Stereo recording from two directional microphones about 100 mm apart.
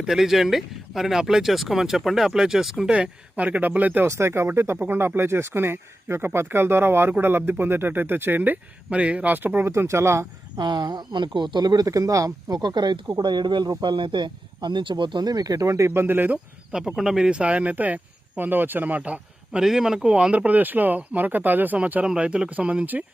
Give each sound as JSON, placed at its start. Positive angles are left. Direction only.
{"t": 0.0, "sound": "speech", "side_deg": -5}
{"t": 10.6, "sound": "speech", "side_deg": -45}
{"t": 12.6, "sound": "speech", "side_deg": -45}
{"t": 16.7, "sound": "speech", "side_deg": -5}